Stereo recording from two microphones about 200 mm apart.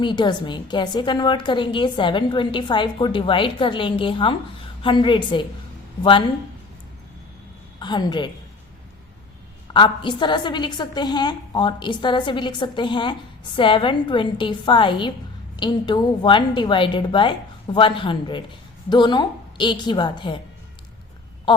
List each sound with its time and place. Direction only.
0.0 s a woman's voice: 25° left (ahead or behind)
7.8 s a woman's voice: 20° left (ahead or behind)
9.7 s a woman's voice: 25° left (ahead or behind)